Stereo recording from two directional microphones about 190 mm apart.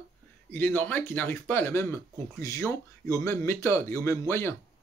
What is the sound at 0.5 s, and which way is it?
Speech, 10° left (ahead or behind).